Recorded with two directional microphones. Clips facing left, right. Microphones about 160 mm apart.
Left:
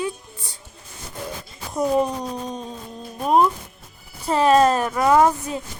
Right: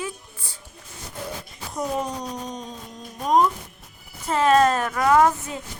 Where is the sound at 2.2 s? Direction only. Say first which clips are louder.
Left 3 dB; 30° left (ahead or behind).